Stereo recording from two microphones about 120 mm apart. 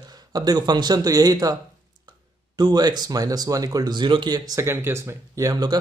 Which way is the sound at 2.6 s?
35° right (ahead or behind).